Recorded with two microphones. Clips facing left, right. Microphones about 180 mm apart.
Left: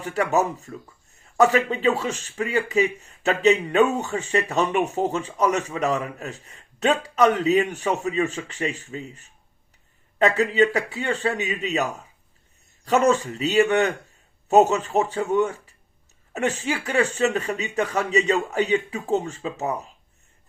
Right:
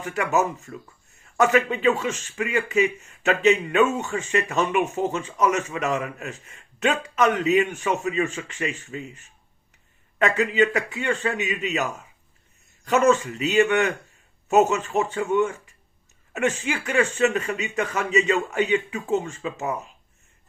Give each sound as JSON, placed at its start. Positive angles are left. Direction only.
{"t": 0.0, "sound": "speech", "side_deg": 35}